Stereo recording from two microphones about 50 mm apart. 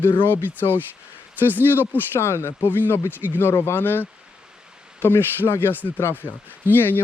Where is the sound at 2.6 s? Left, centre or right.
Left.